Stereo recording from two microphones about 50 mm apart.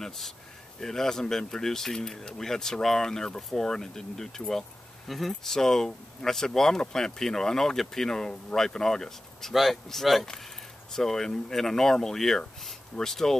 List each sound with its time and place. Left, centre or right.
0.0 s speech: centre